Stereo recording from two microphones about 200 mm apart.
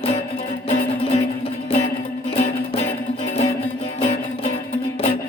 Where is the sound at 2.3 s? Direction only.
30° left (ahead or behind).